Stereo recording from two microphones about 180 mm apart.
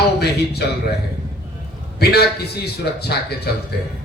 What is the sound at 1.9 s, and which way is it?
A man's voice, 65° left (ahead or behind).